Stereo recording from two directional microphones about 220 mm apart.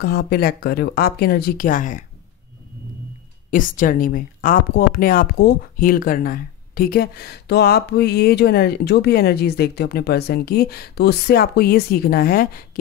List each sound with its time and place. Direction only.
0.0 s speech: 45° left (ahead or behind)
3.4 s speech: 40° left (ahead or behind)